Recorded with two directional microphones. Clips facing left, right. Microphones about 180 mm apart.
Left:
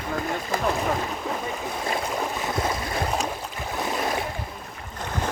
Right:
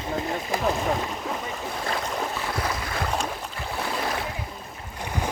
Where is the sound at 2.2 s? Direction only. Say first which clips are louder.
Left 2 dB; 20° left (ahead or behind).